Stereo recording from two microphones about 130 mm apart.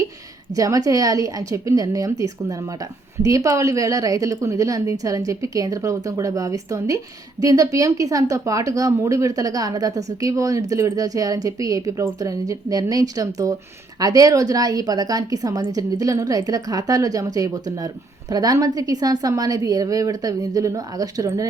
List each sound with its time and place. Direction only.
0.5 s a woman's voice: 25° right (ahead or behind)